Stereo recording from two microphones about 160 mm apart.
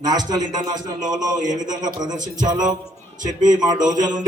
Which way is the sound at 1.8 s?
50° right (ahead or behind).